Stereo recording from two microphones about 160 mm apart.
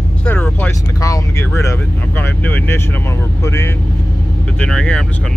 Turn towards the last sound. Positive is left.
turn(degrees=5)  # may be behind; listen again after turning